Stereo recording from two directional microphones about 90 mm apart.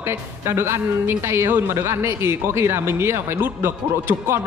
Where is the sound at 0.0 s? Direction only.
25° right (ahead or behind).